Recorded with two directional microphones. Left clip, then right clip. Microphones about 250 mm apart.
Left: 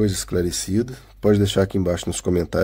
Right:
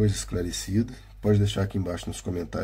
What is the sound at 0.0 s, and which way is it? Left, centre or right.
Speech, left.